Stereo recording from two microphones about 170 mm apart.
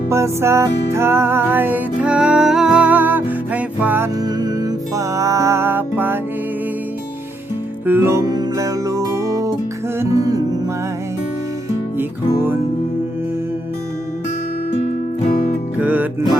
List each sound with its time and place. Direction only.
0.1 s music: 15° right (ahead or behind)
4.2 s music: 25° right (ahead or behind)
7.9 s music: 15° right (ahead or behind)
11.9 s music: 15° right (ahead or behind)
14.7 s music: 40° left (ahead or behind)
15.3 s music: 55° left (ahead or behind)
15.8 s music: 10° right (ahead or behind)